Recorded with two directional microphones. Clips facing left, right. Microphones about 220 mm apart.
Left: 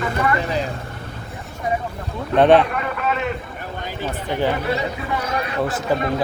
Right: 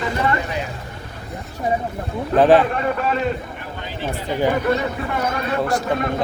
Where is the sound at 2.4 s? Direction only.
Centre (ahead or behind).